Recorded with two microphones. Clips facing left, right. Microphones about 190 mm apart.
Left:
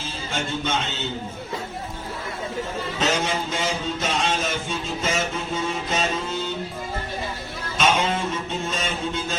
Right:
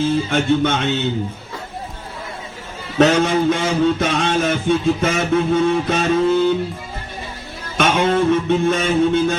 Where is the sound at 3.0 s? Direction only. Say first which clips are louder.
Right 11 dB; 60° right (ahead or behind).